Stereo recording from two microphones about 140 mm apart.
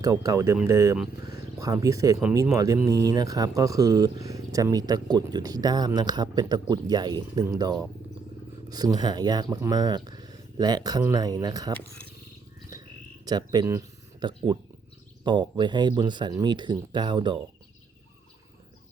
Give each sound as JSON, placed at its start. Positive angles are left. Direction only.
{"t": 0.0, "sound": "speech", "side_deg": -25}
{"t": 12.7, "sound": "frog", "side_deg": -30}
{"t": 13.2, "sound": "speech", "side_deg": -30}